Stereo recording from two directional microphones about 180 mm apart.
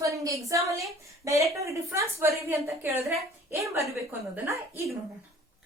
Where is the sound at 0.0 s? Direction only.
15° right (ahead or behind).